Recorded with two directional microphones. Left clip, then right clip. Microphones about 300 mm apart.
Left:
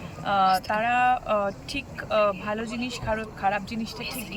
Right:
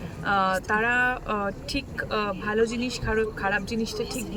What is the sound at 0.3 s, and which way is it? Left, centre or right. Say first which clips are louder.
Speech: left 2 dB; centre.